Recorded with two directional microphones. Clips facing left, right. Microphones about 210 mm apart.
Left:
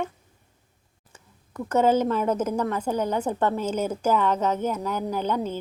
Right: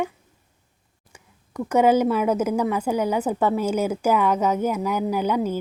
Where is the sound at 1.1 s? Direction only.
10° right (ahead or behind).